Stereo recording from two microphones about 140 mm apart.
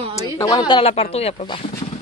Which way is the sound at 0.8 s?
45° left (ahead or behind).